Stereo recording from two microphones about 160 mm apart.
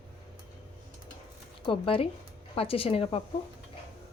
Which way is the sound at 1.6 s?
35° left (ahead or behind).